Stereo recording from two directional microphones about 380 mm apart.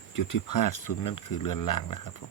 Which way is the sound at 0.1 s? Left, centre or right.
Left.